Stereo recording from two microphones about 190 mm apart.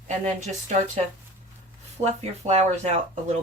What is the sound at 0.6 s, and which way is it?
Speech, 40° right (ahead or behind).